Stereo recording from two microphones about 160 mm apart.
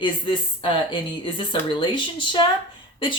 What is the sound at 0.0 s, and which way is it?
Speech, 30° left (ahead or behind).